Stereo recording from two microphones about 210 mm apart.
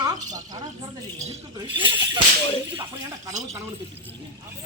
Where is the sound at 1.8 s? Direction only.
25° right (ahead or behind).